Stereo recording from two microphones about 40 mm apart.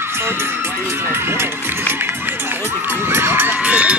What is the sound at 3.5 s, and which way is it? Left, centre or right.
Speech, right.